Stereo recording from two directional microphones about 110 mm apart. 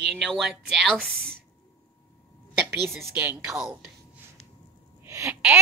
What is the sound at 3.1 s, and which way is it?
Speech, 20° right (ahead or behind).